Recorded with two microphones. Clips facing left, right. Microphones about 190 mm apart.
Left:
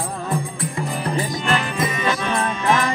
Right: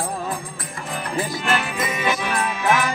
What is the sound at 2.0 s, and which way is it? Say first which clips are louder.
Music: right 1 dB; 15° right (ahead or behind).